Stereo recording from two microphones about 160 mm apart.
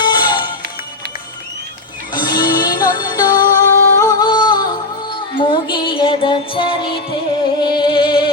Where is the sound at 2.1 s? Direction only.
30° left (ahead or behind).